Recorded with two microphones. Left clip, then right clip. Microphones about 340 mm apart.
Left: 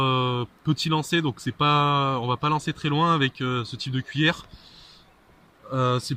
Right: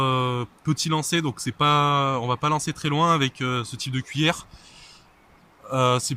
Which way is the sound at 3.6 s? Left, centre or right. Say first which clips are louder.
Right 1 dB; centre.